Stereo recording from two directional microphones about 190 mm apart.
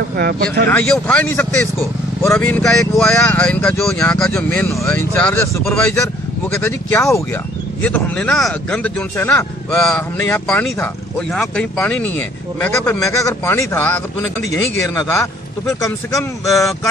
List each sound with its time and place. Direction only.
0.2 s speech: 55° right (ahead or behind)
0.7 s speech: 5° left (ahead or behind)
15.6 s speech: 15° left (ahead or behind)